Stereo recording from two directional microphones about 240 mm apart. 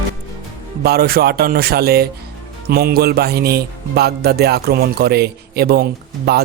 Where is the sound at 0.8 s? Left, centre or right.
Right.